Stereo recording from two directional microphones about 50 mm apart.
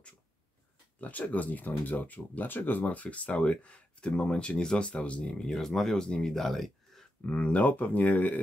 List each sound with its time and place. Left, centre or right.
1.0 s speech: left; by 6.3 s centre
6.3 s a sound: centre
7.2 s speech: left